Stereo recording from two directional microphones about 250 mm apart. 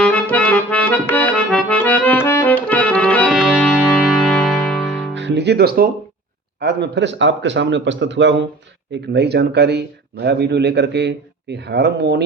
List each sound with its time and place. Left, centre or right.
0.0 s accordion: centre
5.1 s music: right
6.6 s a man's voice: right